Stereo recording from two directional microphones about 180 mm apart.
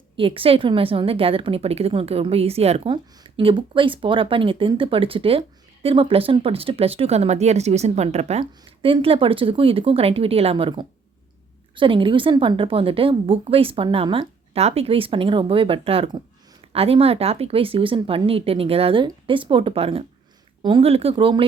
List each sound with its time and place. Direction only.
0.2 s a woman's voice: 30° right (ahead or behind)